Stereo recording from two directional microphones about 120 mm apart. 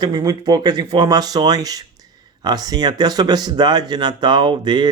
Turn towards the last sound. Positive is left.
turn(degrees=-40)  # may be behind; listen again after turning